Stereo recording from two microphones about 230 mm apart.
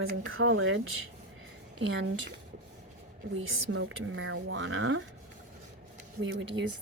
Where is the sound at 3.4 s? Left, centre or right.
Right.